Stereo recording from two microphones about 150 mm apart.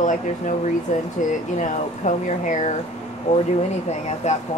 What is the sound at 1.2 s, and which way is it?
Speech, 60° left (ahead or behind).